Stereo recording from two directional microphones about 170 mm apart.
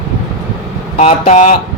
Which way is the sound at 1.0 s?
40° left (ahead or behind).